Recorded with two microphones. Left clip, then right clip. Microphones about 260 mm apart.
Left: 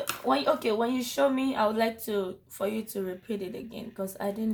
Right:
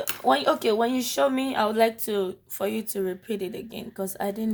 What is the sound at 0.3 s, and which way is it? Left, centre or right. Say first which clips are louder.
Speech: right 4 dB; right.